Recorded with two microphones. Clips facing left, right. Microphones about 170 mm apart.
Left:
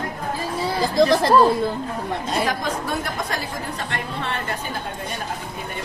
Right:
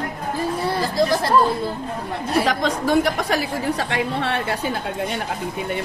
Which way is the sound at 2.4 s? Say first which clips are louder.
Right 3 dB; 75° right (ahead or behind).